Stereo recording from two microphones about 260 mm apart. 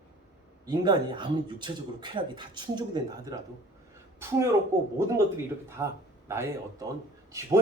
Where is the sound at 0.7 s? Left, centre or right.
Centre.